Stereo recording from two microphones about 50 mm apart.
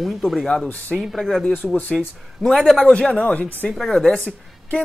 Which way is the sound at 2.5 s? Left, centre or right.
Centre.